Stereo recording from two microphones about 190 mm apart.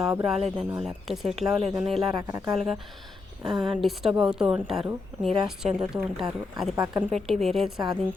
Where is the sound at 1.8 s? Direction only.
30° right (ahead or behind).